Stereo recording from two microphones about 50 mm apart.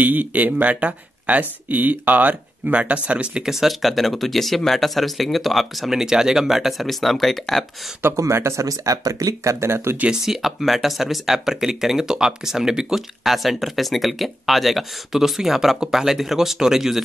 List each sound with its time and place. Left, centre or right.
0.0 s speech: right
3.4 s speech: centre
5.9 s speech: centre
8.2 s speech: right
10.2 s speech: centre